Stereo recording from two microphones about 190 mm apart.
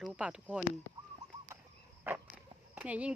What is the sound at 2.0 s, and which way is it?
Dog, 5° right (ahead or behind).